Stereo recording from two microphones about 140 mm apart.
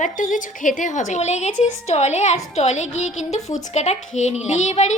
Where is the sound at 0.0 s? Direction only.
70° left (ahead or behind).